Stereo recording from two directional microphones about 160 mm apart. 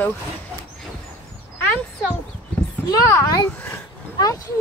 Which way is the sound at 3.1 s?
20° left (ahead or behind).